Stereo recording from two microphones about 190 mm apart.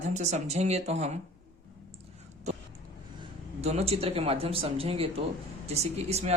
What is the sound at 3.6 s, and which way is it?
Speech, 35° right (ahead or behind).